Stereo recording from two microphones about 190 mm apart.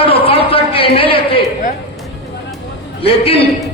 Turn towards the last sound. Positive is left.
turn(degrees=30)  # may be behind; listen again after turning